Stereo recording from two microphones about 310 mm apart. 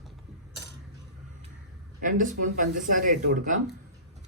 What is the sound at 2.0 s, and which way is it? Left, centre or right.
Speech, right.